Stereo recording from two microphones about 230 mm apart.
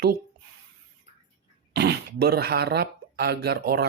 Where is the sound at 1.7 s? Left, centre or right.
Right.